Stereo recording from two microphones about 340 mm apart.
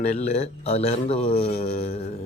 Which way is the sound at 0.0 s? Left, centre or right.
Centre.